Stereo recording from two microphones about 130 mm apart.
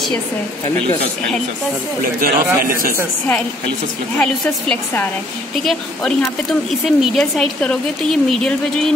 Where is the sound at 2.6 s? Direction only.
90° right.